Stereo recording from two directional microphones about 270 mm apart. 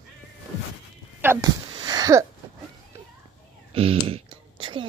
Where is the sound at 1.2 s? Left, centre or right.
Centre.